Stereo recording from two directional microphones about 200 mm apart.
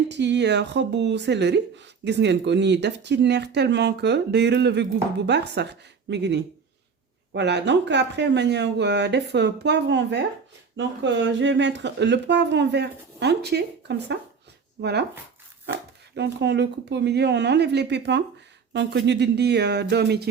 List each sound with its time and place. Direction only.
0.1 s speech: 60° right (ahead or behind)
16.1 s speech: 60° right (ahead or behind)